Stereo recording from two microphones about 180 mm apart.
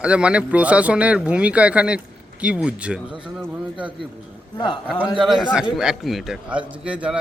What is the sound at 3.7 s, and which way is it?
Speech, 30° right (ahead or behind).